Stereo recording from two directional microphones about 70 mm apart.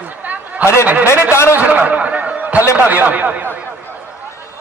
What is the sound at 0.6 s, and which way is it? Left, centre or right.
Speech, left.